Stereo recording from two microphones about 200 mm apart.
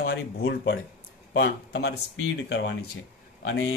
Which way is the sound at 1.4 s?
55° left (ahead or behind).